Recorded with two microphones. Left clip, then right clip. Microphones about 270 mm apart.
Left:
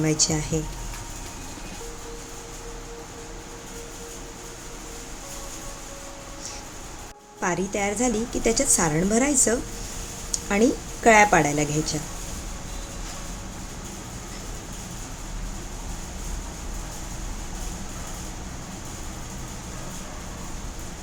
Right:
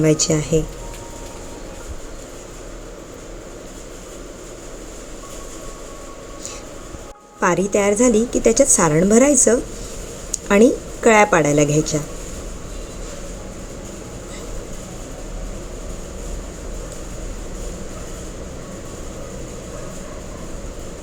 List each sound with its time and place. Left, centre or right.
0.0 s a woman's voice: centre
7.3 s a woman's voice: centre